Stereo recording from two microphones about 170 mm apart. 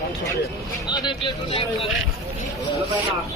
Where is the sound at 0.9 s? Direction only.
25° left (ahead or behind).